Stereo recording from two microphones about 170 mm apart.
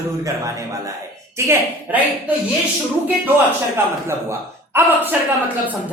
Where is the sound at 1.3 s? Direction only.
15° right (ahead or behind).